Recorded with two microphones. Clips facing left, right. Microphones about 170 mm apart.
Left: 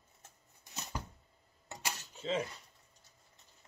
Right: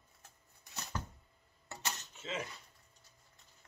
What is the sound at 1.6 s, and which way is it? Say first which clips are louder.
Cutlery: left 1 dB; 15° left (ahead or behind).